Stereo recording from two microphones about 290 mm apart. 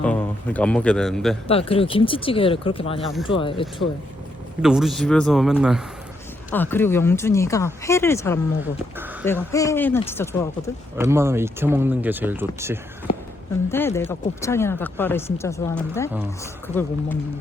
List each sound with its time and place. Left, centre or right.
0.0 s a man's voice: centre
1.5 s speech: centre
4.6 s a man's voice: centre
9.5 s speech: centre
10.9 s speech: centre
13.1 s a sound: centre
13.7 s speech: centre